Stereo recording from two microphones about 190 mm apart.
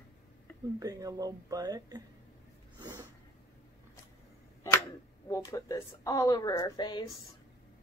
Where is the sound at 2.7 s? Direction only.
20° right (ahead or behind).